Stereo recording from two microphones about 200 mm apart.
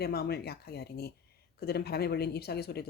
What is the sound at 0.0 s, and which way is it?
Speech, 50° left (ahead or behind).